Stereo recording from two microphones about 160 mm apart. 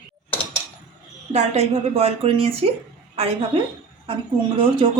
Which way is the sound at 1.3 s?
45° right (ahead or behind).